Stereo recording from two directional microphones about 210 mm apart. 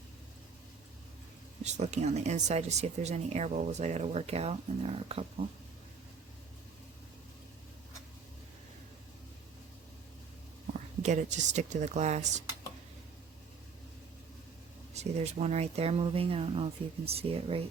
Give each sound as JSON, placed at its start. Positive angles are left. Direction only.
{"t": 1.6, "sound": "speech", "side_deg": -30}
{"t": 11.0, "sound": "speech", "side_deg": -35}
{"t": 14.9, "sound": "speech", "side_deg": -30}